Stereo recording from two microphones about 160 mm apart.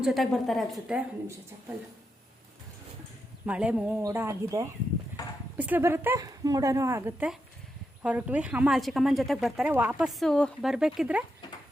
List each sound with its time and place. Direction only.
0.0 s a woman's voice: centre (ahead or behind)
3.4 s a woman's voice: 10° right (ahead or behind)